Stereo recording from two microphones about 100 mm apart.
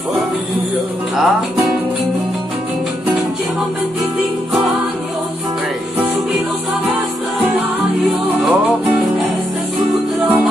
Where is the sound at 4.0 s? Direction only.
Centre (ahead or behind).